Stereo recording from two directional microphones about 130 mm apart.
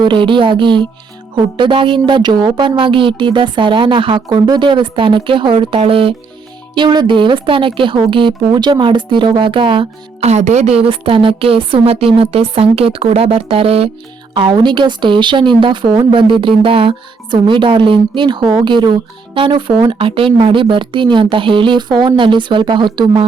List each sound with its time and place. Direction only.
0.0 s speech: 40° right (ahead or behind)
10.2 s a woman's voice: 60° right (ahead or behind); by 23.2 s 35° right (ahead or behind)